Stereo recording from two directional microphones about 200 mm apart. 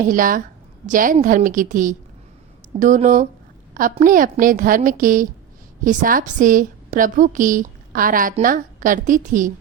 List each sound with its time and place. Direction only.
0.1 s a woman's voice: 40° right (ahead or behind)